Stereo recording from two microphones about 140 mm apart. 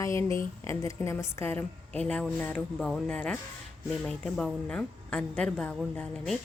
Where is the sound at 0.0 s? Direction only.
20° left (ahead or behind).